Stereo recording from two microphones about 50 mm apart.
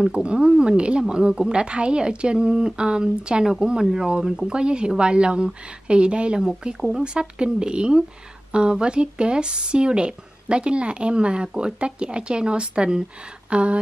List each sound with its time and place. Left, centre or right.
0.0 s a woman's voice: right